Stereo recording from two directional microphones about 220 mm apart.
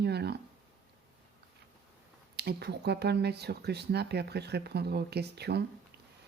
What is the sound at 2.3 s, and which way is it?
Speech, 45° right (ahead or behind).